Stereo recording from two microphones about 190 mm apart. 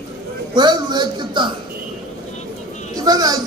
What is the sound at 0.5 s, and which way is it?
Speech, 25° right (ahead or behind).